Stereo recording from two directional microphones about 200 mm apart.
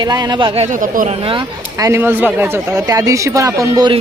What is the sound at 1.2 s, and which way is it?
Speech, 20° right (ahead or behind).